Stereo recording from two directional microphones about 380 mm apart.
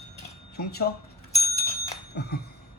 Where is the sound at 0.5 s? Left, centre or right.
Left.